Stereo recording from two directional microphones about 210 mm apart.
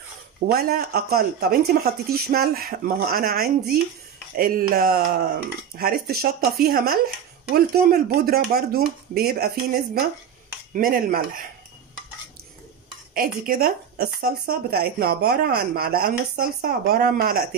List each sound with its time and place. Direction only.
0.5 s speech: 45° right (ahead or behind)
10.7 s speech: 45° right (ahead or behind)
13.1 s speech: 45° right (ahead or behind)